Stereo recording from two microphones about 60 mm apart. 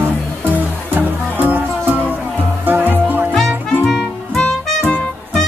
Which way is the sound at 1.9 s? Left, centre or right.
Left.